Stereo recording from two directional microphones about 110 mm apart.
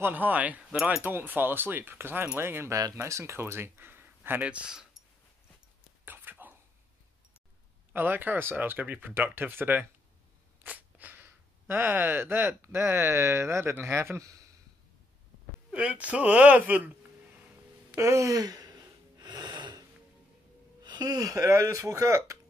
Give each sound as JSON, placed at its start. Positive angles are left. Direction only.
{"t": 0.0, "sound": "speech", "side_deg": -15}
{"t": 1.0, "sound": "speech", "side_deg": -15}
{"t": 6.0, "sound": "dog", "side_deg": -15}
{"t": 7.9, "sound": "speech", "side_deg": -15}
{"t": 15.7, "sound": "speech", "side_deg": -10}
{"t": 17.9, "sound": "a sound", "side_deg": -25}
{"t": 20.8, "sound": "speech", "side_deg": -40}